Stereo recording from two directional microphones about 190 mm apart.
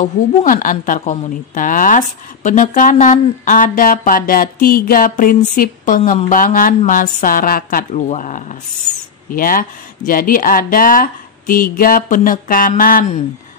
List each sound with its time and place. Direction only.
0.0 s a woman's voice: 45° left (ahead or behind)